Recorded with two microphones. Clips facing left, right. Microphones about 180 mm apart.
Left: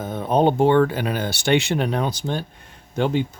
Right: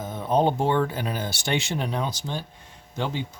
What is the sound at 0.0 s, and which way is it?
Speech, 60° left (ahead or behind).